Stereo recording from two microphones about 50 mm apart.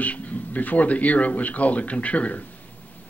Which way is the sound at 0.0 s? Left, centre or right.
Left.